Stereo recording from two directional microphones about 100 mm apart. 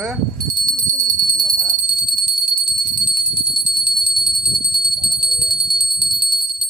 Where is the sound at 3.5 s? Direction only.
55° right (ahead or behind).